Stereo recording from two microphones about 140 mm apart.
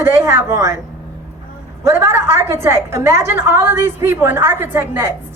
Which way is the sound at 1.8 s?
20° right (ahead or behind).